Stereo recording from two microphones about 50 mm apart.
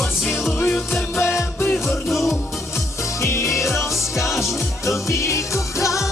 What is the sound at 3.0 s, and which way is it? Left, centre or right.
Music, left.